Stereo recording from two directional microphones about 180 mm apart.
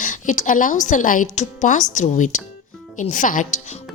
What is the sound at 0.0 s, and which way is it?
Speech, 45° left (ahead or behind).